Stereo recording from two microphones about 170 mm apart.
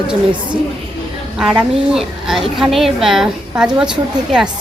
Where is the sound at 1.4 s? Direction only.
5° right (ahead or behind).